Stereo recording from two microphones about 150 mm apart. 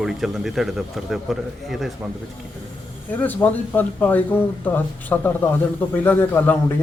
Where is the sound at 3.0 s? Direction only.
10° left (ahead or behind).